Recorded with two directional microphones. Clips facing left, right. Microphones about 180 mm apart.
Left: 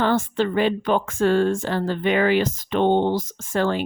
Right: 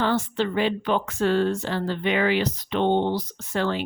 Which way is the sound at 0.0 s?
50° left (ahead or behind).